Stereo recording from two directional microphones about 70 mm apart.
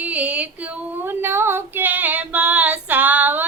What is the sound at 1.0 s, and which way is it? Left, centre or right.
Female singing, right.